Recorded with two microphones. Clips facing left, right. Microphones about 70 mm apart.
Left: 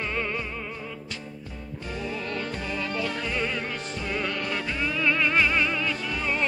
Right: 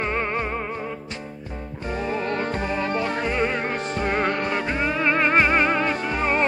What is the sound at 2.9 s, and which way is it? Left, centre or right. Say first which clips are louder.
Music: right 5 dB; right.